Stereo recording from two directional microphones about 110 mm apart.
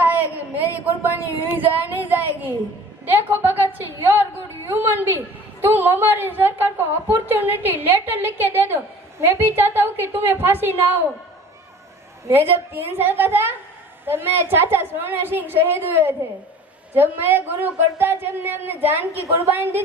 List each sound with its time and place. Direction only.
0.0 s a sound: 15° right (ahead or behind)
1.5 s a woman's voice: 15° right (ahead or behind)
12.3 s a woman's voice: 20° right (ahead or behind)